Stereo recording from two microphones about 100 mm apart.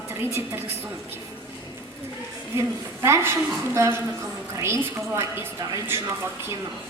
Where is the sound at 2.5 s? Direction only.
30° right (ahead or behind).